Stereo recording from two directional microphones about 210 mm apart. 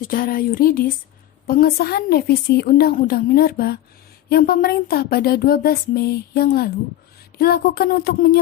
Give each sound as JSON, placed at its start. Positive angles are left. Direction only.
{"t": 0.0, "sound": "speech", "side_deg": 45}